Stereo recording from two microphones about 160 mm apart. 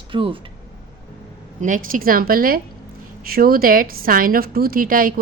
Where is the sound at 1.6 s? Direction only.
55° right (ahead or behind).